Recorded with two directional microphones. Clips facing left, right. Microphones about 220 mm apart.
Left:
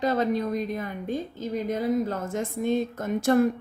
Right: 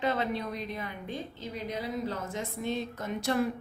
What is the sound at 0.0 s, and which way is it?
Speech, 40° left (ahead or behind).